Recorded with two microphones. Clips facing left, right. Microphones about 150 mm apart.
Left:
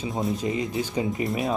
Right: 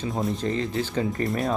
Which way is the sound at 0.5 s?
15° left (ahead or behind).